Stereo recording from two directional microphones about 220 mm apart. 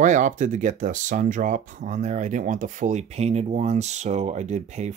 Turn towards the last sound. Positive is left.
turn(degrees=-30)  # may be behind; listen again after turning